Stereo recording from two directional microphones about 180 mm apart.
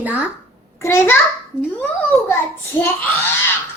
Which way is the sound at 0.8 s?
15° left (ahead or behind).